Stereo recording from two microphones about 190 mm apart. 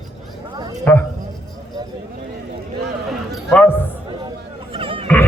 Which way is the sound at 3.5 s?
10° left (ahead or behind).